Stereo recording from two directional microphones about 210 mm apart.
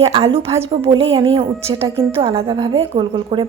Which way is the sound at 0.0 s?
25° right (ahead or behind).